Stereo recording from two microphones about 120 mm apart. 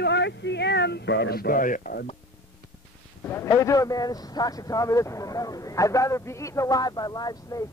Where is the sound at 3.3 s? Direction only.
25° left (ahead or behind).